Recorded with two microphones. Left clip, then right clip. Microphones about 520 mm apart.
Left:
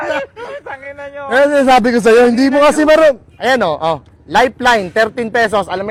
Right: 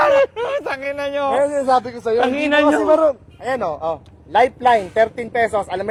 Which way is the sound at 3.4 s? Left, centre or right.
Left.